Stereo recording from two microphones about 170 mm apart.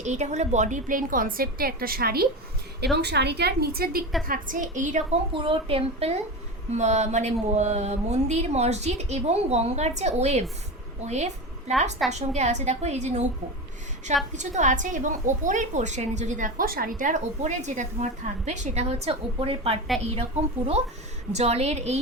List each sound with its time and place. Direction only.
0.0 s a woman's voice: 45° right (ahead or behind); by 2.2 s 60° right (ahead or behind)
2.8 s a woman's voice: 75° right (ahead or behind)
4.3 s a woman's voice: 50° right (ahead or behind)
5.3 s speech: 30° right (ahead or behind)
14.3 s a woman's voice: 45° right (ahead or behind)
21.3 s speech: 40° right (ahead or behind)